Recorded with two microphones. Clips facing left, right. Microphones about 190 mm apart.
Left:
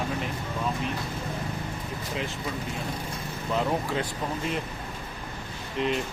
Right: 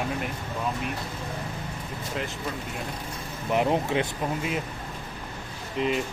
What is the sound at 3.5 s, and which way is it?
Speech, 20° right (ahead or behind).